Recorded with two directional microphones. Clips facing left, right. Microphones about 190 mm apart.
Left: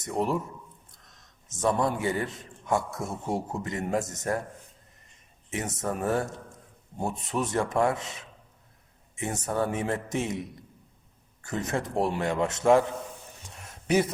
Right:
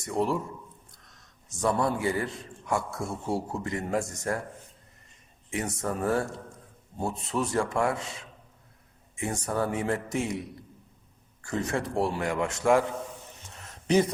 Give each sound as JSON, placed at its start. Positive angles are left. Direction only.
{"t": 0.0, "sound": "a man's voice", "side_deg": 20}
{"t": 1.5, "sound": "a man's voice", "side_deg": 20}
{"t": 5.5, "sound": "a man's voice", "side_deg": 20}
{"t": 11.4, "sound": "a man's voice", "side_deg": 20}
{"t": 13.8, "sound": "speech", "side_deg": 10}